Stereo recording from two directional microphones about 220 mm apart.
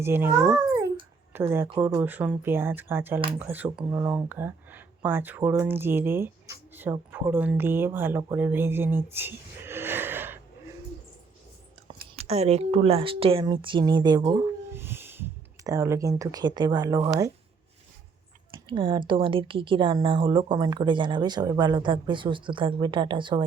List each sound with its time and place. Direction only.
0.0 s speech: 10° right (ahead or behind)
12.1 s speech: 30° right (ahead or behind)
14.7 s a sound: 10° right (ahead or behind)
18.7 s speech: 20° right (ahead or behind)